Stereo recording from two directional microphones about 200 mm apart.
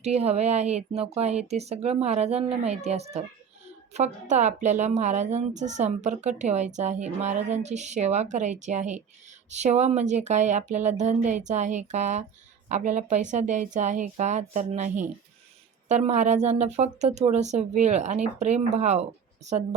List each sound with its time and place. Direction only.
0.0 s a woman's voice: 30° right (ahead or behind)